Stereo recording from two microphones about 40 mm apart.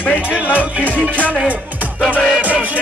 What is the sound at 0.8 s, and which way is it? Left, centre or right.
Music, left.